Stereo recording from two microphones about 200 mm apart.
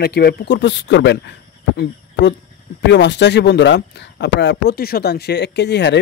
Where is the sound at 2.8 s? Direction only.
60° left (ahead or behind).